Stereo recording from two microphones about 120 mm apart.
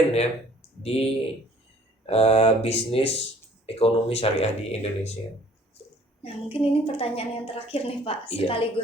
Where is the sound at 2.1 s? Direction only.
60° left (ahead or behind).